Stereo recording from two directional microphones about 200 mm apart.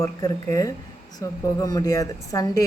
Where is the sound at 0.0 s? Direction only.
15° left (ahead or behind).